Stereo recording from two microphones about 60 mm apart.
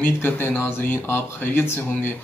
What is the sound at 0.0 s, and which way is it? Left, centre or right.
Speech, left.